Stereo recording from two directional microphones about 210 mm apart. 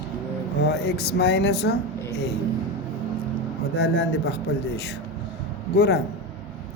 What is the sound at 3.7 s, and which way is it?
Speech, 55° left (ahead or behind).